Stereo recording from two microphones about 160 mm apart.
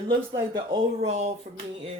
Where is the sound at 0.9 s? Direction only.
40° right (ahead or behind).